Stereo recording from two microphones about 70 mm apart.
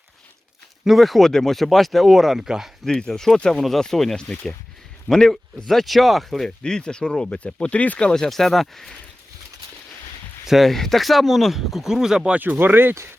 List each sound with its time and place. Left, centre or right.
0.9 s speech: centre
2.8 s speech: centre
10.4 s speech: centre
12.4 s speech: right